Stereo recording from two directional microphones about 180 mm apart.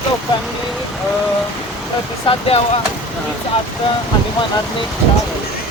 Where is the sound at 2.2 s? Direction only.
30° left (ahead or behind).